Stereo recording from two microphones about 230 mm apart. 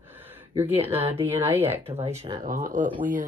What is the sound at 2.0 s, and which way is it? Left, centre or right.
Speech, right.